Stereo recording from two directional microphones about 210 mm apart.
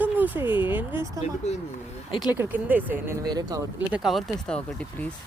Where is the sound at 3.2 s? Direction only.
20° right (ahead or behind).